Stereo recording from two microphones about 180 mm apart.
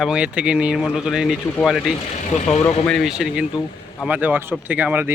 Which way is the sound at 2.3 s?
35° left (ahead or behind).